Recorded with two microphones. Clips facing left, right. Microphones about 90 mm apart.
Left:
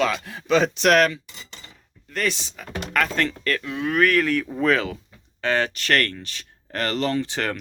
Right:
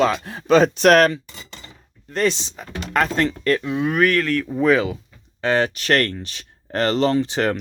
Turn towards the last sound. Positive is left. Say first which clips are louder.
# right 5 dB
turn(degrees=-20)  # may be behind; listen again after turning